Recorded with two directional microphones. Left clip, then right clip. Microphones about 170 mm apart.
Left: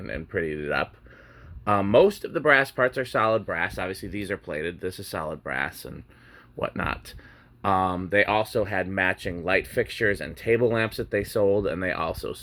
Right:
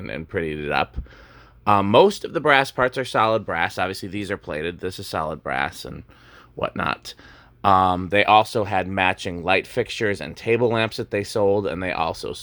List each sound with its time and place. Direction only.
0.0 s speech: 30° right (ahead or behind)